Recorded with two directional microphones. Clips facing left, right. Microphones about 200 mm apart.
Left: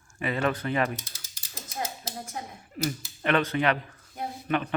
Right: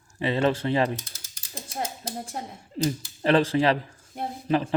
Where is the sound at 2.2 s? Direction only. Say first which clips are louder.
Right 3 dB; 25° right (ahead or behind).